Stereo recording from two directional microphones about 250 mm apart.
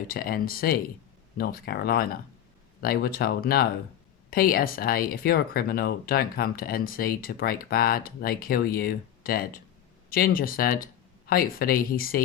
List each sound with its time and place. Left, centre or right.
0.1 s speech: left